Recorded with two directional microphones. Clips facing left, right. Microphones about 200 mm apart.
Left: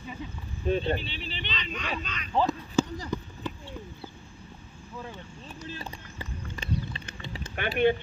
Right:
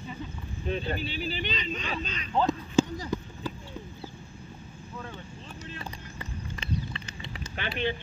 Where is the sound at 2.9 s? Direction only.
10° right (ahead or behind).